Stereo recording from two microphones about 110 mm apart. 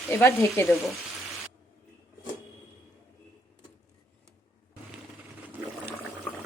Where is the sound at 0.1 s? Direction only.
25° left (ahead or behind).